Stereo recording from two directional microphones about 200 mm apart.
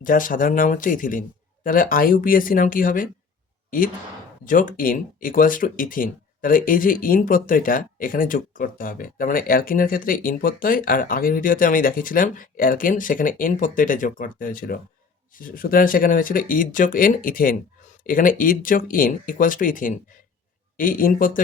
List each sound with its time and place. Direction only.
0.0 s speech: 45° left (ahead or behind)
4.4 s speech: 45° left (ahead or behind)